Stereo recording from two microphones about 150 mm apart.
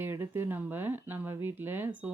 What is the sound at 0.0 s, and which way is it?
Speech, 15° right (ahead or behind).